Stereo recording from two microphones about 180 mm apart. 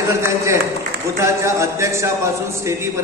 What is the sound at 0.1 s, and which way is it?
A man's voice, 15° right (ahead or behind).